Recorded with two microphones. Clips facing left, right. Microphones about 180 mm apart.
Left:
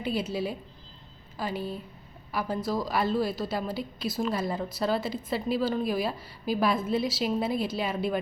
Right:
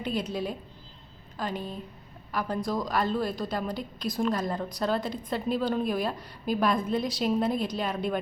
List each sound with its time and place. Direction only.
0.0 s a woman's voice: 5° left (ahead or behind)